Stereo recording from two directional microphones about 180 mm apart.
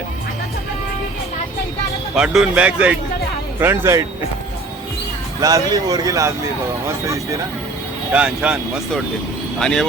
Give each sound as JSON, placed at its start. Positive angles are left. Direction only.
{"t": 2.1, "sound": "a man's voice", "side_deg": -5}
{"t": 5.4, "sound": "a man's voice", "side_deg": -20}
{"t": 8.1, "sound": "speech", "side_deg": -5}